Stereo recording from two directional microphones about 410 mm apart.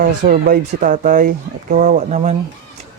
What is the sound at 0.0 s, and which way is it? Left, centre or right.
Speech, centre.